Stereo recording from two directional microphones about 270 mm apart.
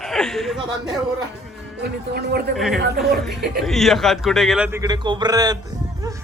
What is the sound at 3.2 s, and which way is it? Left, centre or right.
A man's voice, centre.